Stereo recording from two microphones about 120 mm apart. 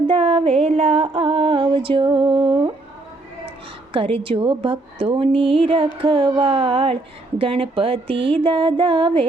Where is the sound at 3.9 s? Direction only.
50° right (ahead or behind).